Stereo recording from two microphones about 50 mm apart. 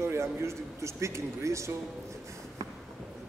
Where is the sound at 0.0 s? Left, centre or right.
Right.